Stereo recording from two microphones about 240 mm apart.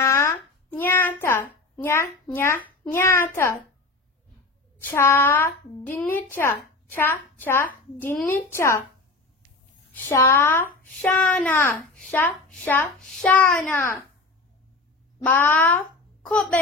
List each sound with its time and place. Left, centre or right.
0.0 s a sound: centre
2.8 s a woman's voice: centre
4.8 s a woman's voice: centre
9.9 s a woman's voice: centre
15.2 s a child's voice: centre